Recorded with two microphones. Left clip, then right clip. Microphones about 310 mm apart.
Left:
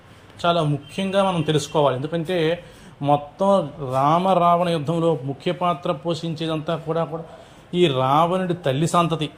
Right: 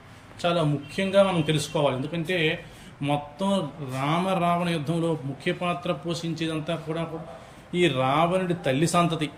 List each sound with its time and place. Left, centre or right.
0.4 s a man's voice: centre